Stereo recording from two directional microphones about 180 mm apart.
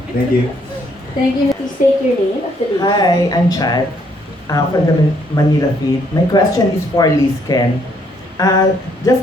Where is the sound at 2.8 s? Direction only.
25° left (ahead or behind).